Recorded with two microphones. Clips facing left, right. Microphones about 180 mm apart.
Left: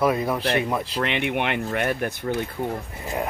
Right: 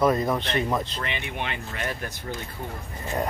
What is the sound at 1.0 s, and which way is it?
Speech, 65° left (ahead or behind).